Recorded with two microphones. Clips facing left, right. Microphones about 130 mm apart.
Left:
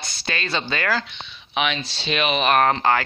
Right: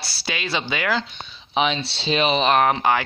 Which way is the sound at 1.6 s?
30° right (ahead or behind).